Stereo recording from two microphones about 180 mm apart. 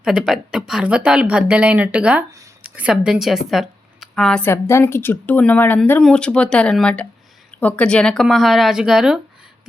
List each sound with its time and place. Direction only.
0.0 s a woman's voice: 5° right (ahead or behind)
2.3 s a sound: 20° right (ahead or behind)
2.6 s speech: 5° right (ahead or behind)